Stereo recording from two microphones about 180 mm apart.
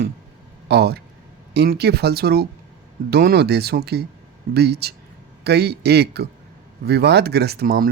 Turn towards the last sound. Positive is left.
turn(degrees=-55)  # may be behind; listen again after turning